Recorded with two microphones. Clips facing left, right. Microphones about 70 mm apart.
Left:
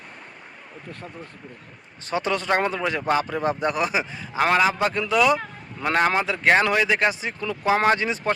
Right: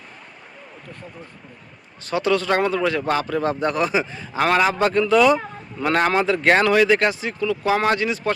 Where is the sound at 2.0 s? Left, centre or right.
Left.